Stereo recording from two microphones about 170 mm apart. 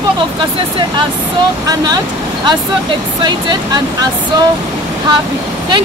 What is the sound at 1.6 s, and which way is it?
Speech, 20° right (ahead or behind).